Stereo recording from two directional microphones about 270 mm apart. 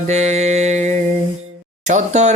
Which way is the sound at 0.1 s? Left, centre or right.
Right.